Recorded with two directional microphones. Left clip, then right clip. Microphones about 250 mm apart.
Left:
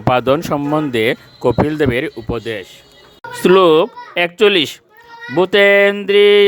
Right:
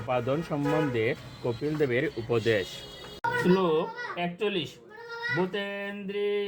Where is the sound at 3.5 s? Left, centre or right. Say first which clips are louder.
Left 19 dB; left.